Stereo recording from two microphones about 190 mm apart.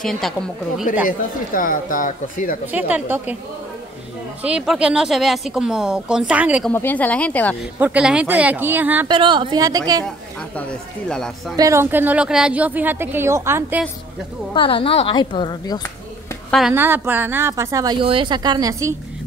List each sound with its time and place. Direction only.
0.0 s speech: 5° left (ahead or behind)
1.0 s speech: 45° left (ahead or behind)
2.6 s a woman's voice: 10° right (ahead or behind)
4.4 s speech: 5° right (ahead or behind)
6.7 s a woman's voice: 10° left (ahead or behind)
7.8 s a woman's voice: 5° right (ahead or behind)
9.0 s a woman's voice: 25° right (ahead or behind)
11.5 s a woman's voice: 15° right (ahead or behind)
14.5 s a woman's voice: 30° left (ahead or behind)
16.4 s a woman's voice: centre (ahead or behind)
16.7 s a woman's voice: 10° right (ahead or behind)